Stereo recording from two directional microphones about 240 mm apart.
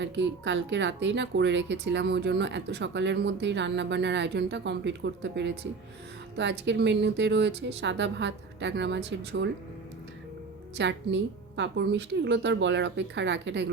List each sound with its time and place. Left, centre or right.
0.0 s a woman's voice: right
10.8 s a woman's voice: right